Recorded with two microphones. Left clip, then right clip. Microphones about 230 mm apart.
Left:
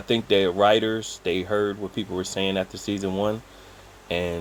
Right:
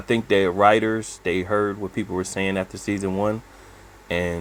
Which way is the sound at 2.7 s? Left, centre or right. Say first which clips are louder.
Right 2 dB; right.